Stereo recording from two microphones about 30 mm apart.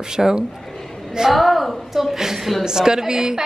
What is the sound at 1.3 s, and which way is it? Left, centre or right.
Speech, centre.